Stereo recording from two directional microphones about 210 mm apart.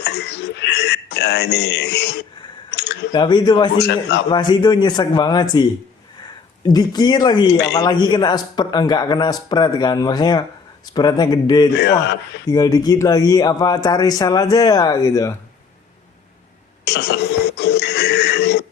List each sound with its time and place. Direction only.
0.0 s speech: 55° left (ahead or behind)
2.7 s a sound: 55° left (ahead or behind)
3.1 s a man's voice: 20° left (ahead or behind)
3.8 s a man's voice: 50° left (ahead or behind)
4.3 s a man's voice: 20° left (ahead or behind)
11.8 s a man's voice: 55° left (ahead or behind)
12.5 s speech: 15° left (ahead or behind)
16.8 s speech: 55° left (ahead or behind)
17.6 s music: 55° left (ahead or behind)